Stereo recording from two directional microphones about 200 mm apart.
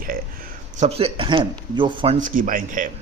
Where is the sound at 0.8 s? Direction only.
30° right (ahead or behind).